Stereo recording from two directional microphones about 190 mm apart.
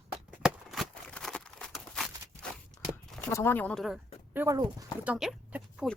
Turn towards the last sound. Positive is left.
turn(degrees=0)  # may be behind; listen again after turning